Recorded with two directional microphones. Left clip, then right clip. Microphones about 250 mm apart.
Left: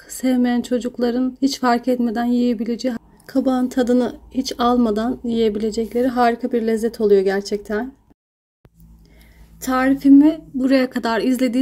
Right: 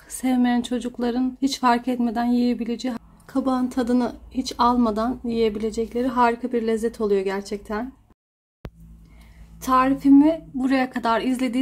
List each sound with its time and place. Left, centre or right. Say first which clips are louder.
0.0 s speech: left 3 dB; centre
3.5 s speech: left 5 dB; right
4.7 s speech: left 3 dB; centre
9.6 s speech: even; centre